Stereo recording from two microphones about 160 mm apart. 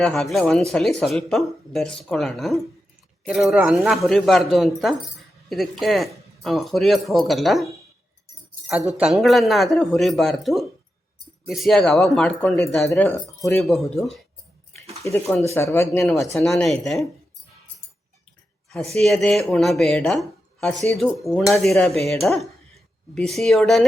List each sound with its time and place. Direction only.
0.0 s speech: centre (ahead or behind)
9.0 s speech: centre (ahead or behind)
13.6 s speech: centre (ahead or behind)
14.7 s a sound: 15° left (ahead or behind)
15.3 s speech: 15° left (ahead or behind)
15.9 s speech: 5° left (ahead or behind)
18.9 s speech: centre (ahead or behind)